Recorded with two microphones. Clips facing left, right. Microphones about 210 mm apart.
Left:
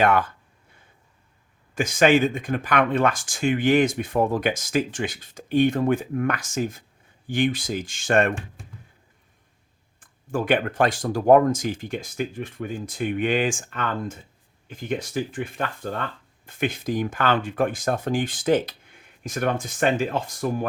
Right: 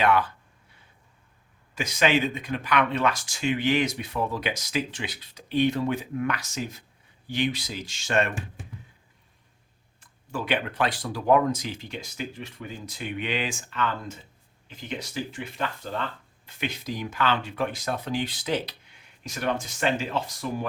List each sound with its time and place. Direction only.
0.0 s speech: 50° left (ahead or behind)
1.7 s speech: 50° left (ahead or behind)
10.0 s speech: 50° left (ahead or behind)